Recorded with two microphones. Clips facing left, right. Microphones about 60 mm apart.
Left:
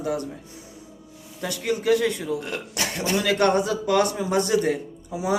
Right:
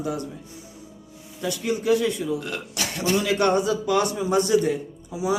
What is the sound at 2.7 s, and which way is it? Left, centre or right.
A man's voice, left.